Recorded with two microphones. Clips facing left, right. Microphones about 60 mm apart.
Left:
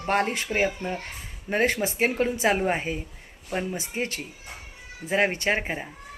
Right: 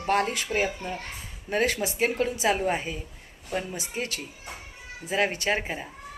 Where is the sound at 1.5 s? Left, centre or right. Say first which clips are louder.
Left 2 dB; left.